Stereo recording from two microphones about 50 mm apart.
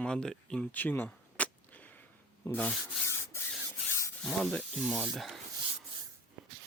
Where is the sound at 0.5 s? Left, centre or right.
Left.